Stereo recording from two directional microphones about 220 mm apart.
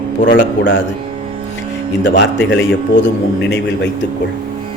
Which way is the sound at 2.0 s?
55° left (ahead or behind).